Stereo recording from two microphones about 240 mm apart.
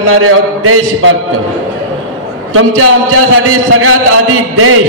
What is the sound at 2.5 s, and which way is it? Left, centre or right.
A man's voice, right.